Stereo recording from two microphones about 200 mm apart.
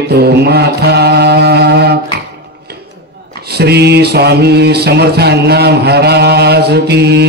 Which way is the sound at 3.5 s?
55° right (ahead or behind).